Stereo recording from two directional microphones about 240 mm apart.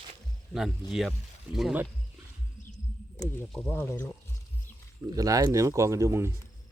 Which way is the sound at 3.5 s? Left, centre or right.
Centre.